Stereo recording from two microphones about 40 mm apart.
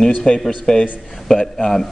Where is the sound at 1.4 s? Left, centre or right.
Centre.